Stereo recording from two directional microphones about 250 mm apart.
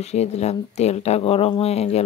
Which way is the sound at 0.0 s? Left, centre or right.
Left.